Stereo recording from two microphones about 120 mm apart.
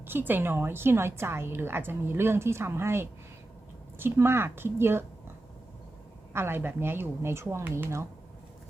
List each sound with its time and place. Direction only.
0.0 s a woman's voice: 15° right (ahead or behind)
6.3 s a woman's voice: 20° right (ahead or behind)